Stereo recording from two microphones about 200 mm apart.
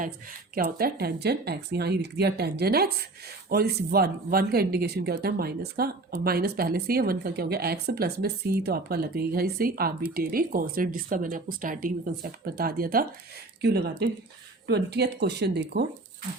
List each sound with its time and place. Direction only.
0.5 s speech: 50° right (ahead or behind)